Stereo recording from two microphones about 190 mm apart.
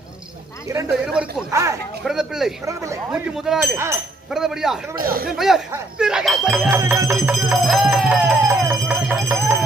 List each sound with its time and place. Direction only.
0.7 s speech: 20° right (ahead or behind)
1.2 s speech: 5° right (ahead or behind)
1.5 s speech: 15° right (ahead or behind)
2.0 s speech: centre (ahead or behind)
2.6 s speech: 15° right (ahead or behind)
3.1 s speech: centre (ahead or behind)
3.7 s speech: 15° right (ahead or behind)
4.3 s speech: centre (ahead or behind)
4.9 s speech: 50° right (ahead or behind)
5.3 s speech: 5° right (ahead or behind)
7.6 s a sound: centre (ahead or behind)